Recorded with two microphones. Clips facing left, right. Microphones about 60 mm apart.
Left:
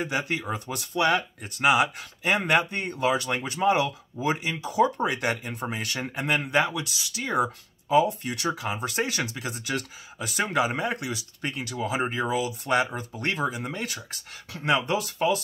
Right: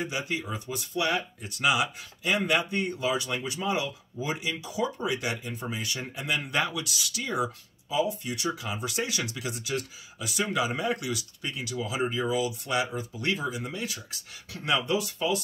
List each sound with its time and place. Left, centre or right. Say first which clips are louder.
0.0 s speech: left 3 dB; left
1.6 s speech: left 4 dB; left
6.4 s speech: left 4 dB; left
9.6 s speech: left 2 dB; left
10.1 s speech: left 3 dB; left
11.8 s speech: left 2 dB; left
14.5 s speech: left 3 dB; left
14.9 s speech: left 3 dB; left